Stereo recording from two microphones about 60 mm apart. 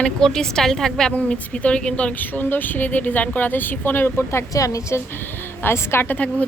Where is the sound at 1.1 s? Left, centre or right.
Centre.